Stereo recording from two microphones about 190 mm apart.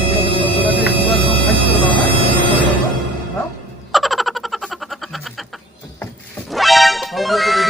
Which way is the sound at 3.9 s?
Centre (ahead or behind).